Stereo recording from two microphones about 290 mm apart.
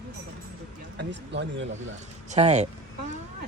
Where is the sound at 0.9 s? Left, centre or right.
Right.